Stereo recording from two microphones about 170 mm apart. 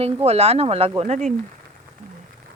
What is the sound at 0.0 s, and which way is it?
Speech, 40° right (ahead or behind).